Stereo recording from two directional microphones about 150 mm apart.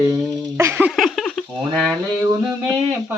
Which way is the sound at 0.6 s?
15° right (ahead or behind).